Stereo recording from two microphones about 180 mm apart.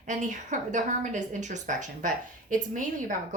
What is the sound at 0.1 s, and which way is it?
A woman's voice, 45° right (ahead or behind).